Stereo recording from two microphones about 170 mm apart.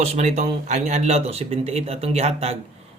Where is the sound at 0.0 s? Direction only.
40° right (ahead or behind).